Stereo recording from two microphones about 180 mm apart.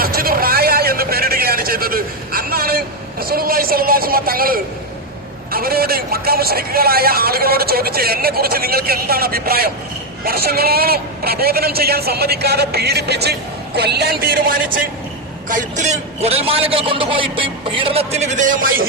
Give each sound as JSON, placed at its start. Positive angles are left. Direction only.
{"t": 0.0, "sound": "vehicle", "side_deg": -55}
{"t": 5.5, "sound": "a man's voice", "side_deg": -55}
{"t": 15.4, "sound": "a man's voice", "side_deg": -45}